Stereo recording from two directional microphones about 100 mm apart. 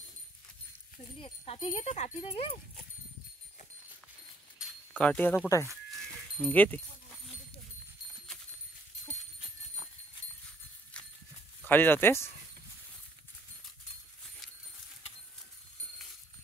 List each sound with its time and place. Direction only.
1.2 s speech: 75° left (ahead or behind)
4.6 s keys jangling: 5° right (ahead or behind)
4.9 s speech: 10° left (ahead or behind)
5.9 s sheep: 5° left (ahead or behind)
6.5 s speech: 15° left (ahead or behind)
11.6 s speech: 20° left (ahead or behind)